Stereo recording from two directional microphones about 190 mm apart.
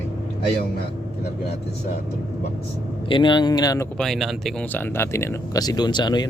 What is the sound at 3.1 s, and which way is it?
Speech, 25° left (ahead or behind).